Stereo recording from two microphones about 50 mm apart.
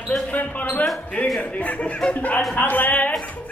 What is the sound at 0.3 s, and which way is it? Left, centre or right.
A man's voice, left.